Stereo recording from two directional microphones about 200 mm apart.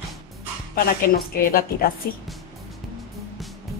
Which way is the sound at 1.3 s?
45° left (ahead or behind).